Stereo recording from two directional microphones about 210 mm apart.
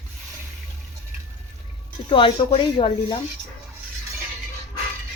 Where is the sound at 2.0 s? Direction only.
25° left (ahead or behind).